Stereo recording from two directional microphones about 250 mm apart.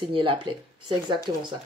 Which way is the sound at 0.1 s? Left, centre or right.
Centre.